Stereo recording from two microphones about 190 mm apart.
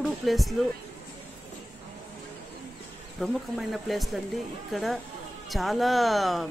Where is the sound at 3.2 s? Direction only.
Centre (ahead or behind).